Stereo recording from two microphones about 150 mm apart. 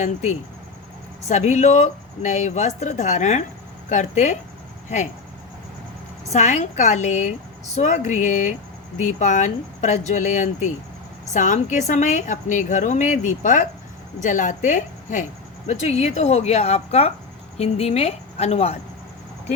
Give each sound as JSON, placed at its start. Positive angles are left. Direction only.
{"t": 0.0, "sound": "speech", "side_deg": 55}
{"t": 6.3, "sound": "a woman's voice", "side_deg": 50}